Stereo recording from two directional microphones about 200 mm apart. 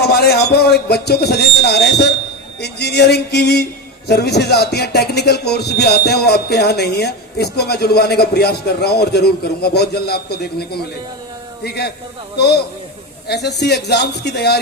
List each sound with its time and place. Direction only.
0.0 s a man's voice: 50° left (ahead or behind)